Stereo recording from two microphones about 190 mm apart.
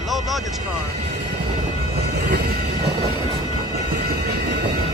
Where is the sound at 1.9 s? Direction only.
55° right (ahead or behind).